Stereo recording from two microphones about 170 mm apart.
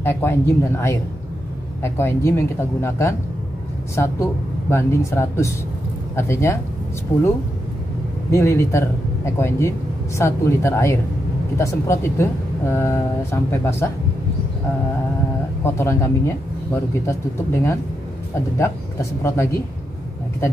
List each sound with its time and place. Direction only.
0.0 s speech: 15° left (ahead or behind)
8.3 s speech: 15° left (ahead or behind)
15.6 s speech: 15° left (ahead or behind)